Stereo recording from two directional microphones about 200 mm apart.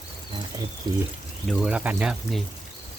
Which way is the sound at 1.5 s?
5° right (ahead or behind).